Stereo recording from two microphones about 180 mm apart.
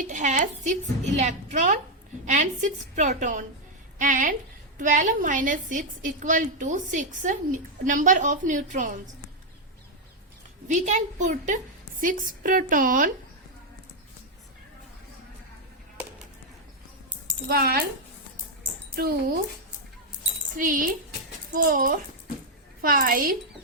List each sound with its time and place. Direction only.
0.0 s a woman's voice: 45° right (ahead or behind)
10.7 s a woman's voice: 40° right (ahead or behind)
17.5 s speech: 60° right (ahead or behind)
20.6 s a woman's voice: 50° right (ahead or behind)